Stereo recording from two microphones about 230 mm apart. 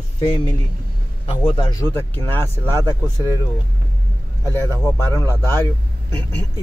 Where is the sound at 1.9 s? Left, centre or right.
Centre.